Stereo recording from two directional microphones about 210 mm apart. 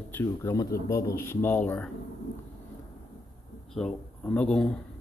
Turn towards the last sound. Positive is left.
turn(degrees=5)  # may be behind; listen again after turning